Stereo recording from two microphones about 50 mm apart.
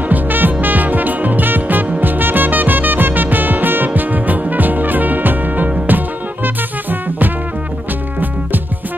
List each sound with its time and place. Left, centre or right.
0.1 s music: right